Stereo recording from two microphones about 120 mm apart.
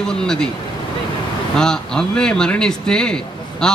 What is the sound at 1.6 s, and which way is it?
Speech, 5° left (ahead or behind).